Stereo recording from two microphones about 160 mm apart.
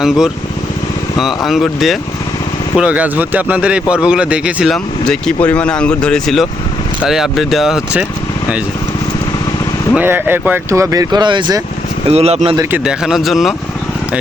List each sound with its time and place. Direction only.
1.5 s a man's voice: centre (ahead or behind)
9.9 s speech: 10° right (ahead or behind); by 11.6 s 30° right (ahead or behind)
12.0 s speech: 40° right (ahead or behind)
12.7 s a man's voice: 5° right (ahead or behind)